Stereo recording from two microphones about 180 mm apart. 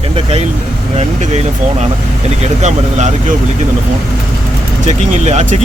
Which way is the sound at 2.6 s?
40° right (ahead or behind).